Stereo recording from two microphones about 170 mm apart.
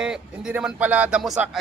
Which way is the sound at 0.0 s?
5° right (ahead or behind).